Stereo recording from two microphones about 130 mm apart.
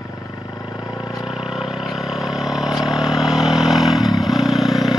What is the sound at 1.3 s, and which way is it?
Vehicle, centre (ahead or behind).